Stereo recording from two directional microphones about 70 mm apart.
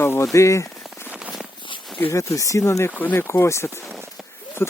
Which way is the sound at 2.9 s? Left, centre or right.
Left.